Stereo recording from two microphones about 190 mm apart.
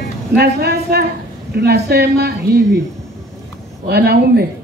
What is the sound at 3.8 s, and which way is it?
Speech, 55° right (ahead or behind).